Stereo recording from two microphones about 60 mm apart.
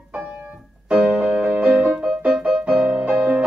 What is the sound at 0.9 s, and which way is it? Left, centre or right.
Keyboard, centre.